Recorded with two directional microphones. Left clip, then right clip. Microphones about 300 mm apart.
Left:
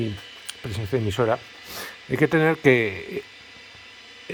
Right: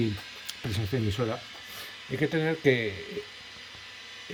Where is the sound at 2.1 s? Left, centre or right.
Left.